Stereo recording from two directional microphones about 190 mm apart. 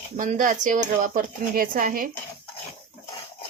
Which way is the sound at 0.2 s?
45° right (ahead or behind).